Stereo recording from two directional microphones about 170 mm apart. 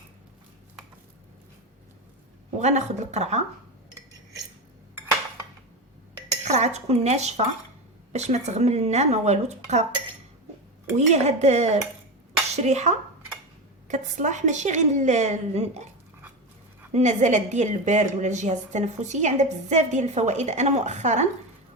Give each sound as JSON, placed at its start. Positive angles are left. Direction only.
{"t": 2.6, "sound": "speech", "side_deg": -45}
{"t": 6.4, "sound": "speech", "side_deg": -40}
{"t": 10.9, "sound": "a woman's voice", "side_deg": -40}
{"t": 16.9, "sound": "a woman's voice", "side_deg": -45}